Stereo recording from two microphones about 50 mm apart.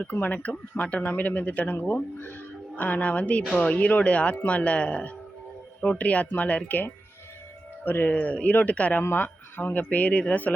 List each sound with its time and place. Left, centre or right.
0.0 s speech: left
7.9 s speech: left
8.2 s speech: left
9.0 s speech: left